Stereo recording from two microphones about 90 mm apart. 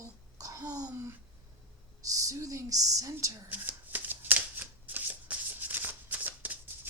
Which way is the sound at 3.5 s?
20° right (ahead or behind).